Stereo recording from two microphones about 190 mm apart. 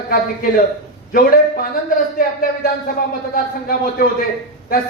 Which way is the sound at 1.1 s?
50° left (ahead or behind).